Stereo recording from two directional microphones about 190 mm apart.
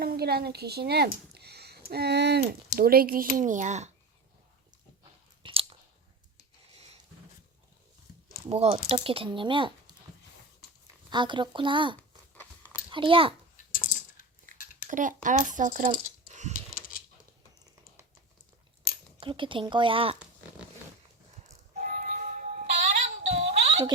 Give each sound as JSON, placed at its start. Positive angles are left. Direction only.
{"t": 0.0, "sound": "a woman's voice", "side_deg": -55}
{"t": 5.4, "sound": "chewing", "side_deg": -30}
{"t": 8.4, "sound": "speech", "side_deg": -35}
{"t": 11.1, "sound": "speech", "side_deg": -25}
{"t": 11.9, "sound": "a sound", "side_deg": 10}
{"t": 12.9, "sound": "a child's voice", "side_deg": -25}
{"t": 13.7, "sound": "typing", "side_deg": 45}
{"t": 14.5, "sound": "a sound", "side_deg": -45}
{"t": 14.8, "sound": "speech", "side_deg": -45}
{"t": 16.5, "sound": "a sound", "side_deg": 50}
{"t": 19.2, "sound": "speech", "side_deg": -25}
{"t": 21.4, "sound": "music", "side_deg": -40}